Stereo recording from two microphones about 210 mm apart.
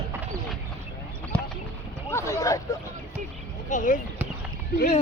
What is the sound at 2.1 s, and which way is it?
Speech, 15° left (ahead or behind).